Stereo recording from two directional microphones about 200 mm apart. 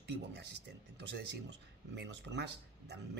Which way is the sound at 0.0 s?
55° right (ahead or behind).